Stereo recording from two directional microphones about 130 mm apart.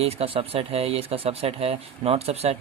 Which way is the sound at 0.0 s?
50° right (ahead or behind).